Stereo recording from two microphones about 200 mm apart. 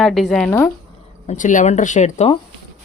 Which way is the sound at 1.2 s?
40° left (ahead or behind).